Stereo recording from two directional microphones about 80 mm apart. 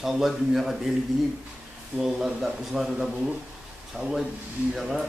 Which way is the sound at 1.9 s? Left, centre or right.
Centre.